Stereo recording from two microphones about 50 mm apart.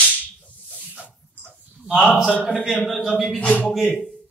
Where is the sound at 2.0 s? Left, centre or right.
Centre.